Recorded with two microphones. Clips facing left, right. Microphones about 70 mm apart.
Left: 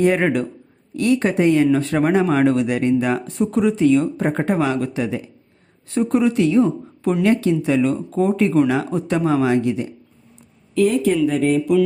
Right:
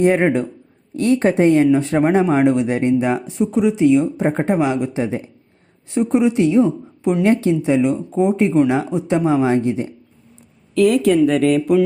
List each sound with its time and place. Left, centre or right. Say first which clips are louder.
0.0 s a woman's voice: right 2 dB; right
3.2 s speech: right 1 dB; centre
4.3 s speech: right 2 dB; right
5.9 s speech: right 2 dB; centre
7.2 s speech: right 1 dB; right
10.8 s speech: right 3 dB; right